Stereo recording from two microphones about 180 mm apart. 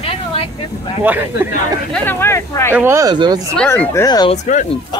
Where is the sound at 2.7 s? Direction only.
15° right (ahead or behind).